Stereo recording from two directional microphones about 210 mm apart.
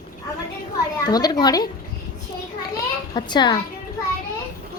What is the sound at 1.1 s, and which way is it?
Speech, 20° left (ahead or behind).